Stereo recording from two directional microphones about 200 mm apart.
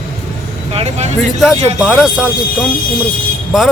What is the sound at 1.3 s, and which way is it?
A man's voice, centre (ahead or behind).